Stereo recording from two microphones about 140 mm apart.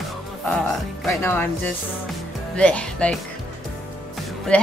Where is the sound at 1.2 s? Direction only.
15° left (ahead or behind).